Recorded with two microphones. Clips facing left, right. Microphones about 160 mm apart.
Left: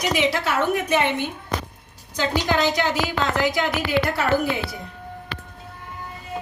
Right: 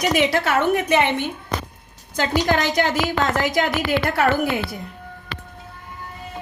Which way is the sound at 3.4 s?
45° right (ahead or behind).